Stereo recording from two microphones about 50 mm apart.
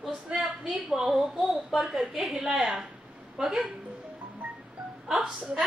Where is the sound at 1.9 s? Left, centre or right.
Centre.